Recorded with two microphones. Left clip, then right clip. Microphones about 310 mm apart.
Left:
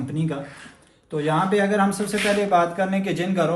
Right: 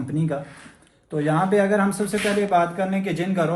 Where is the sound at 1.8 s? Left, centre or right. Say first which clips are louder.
Left 1 dB; centre.